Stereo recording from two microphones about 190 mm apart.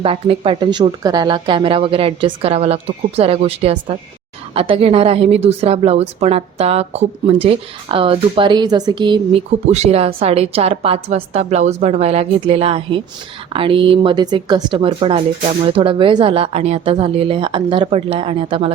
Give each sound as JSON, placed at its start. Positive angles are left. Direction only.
{"t": 0.0, "sound": "a woman's voice", "side_deg": -30}
{"t": 9.6, "sound": "a woman's voice", "side_deg": -35}